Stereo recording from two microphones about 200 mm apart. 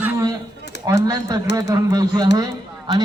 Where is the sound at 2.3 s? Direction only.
20° right (ahead or behind).